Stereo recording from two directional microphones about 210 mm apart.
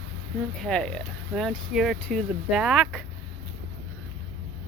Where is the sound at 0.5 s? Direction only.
Centre (ahead or behind).